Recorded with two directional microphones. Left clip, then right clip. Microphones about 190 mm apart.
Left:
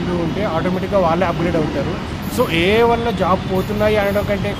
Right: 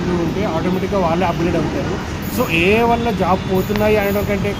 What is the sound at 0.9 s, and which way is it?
Speech, 20° left (ahead or behind).